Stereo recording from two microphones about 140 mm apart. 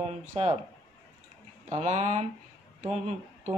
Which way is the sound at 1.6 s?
55° right (ahead or behind).